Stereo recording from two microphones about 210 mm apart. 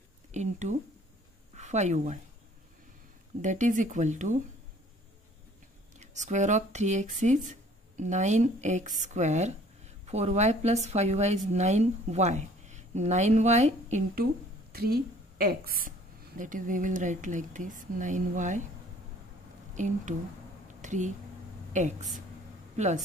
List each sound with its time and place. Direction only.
0.3 s speech: 35° right (ahead or behind)
3.3 s a woman's voice: 35° right (ahead or behind)
5.9 s a woman's voice: 35° right (ahead or behind)
19.7 s a woman's voice: 35° right (ahead or behind)